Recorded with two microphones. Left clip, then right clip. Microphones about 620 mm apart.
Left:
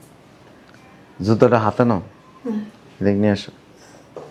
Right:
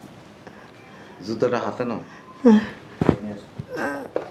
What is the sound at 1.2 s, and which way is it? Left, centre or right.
Speech, left.